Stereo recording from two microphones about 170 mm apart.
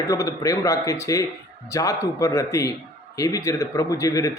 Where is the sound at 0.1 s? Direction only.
20° left (ahead or behind).